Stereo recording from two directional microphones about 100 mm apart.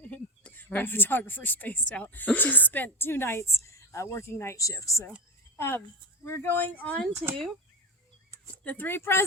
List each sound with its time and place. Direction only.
0.0 s speech: 15° left (ahead or behind)
8.6 s speech: 15° left (ahead or behind)